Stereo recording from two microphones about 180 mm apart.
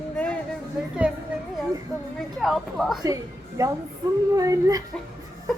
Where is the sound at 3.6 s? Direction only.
20° right (ahead or behind).